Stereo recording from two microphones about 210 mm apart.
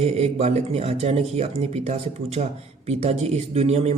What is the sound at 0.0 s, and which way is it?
Speech, 30° right (ahead or behind).